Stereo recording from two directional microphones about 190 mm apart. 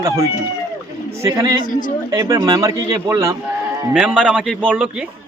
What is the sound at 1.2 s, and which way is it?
Speech, 20° right (ahead or behind).